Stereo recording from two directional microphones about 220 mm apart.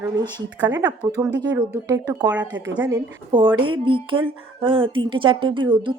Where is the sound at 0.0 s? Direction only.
15° right (ahead or behind).